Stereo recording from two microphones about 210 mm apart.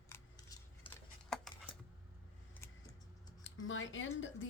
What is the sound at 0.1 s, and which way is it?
Scissors, 15° left (ahead or behind).